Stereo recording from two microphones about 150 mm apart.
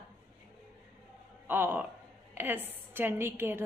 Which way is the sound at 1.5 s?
15° right (ahead or behind).